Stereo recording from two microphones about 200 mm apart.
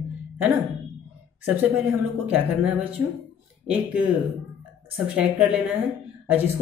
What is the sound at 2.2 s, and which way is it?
A woman's voice, 5° right (ahead or behind).